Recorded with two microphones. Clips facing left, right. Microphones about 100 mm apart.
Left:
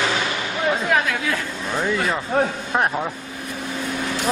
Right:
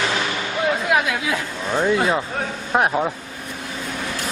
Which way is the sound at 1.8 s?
20° right (ahead or behind).